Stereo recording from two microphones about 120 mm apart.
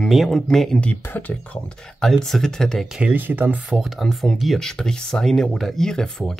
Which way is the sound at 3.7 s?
Centre (ahead or behind).